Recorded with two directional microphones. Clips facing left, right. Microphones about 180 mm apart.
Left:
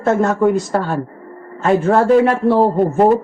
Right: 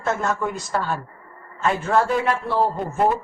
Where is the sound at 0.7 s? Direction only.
50° left (ahead or behind).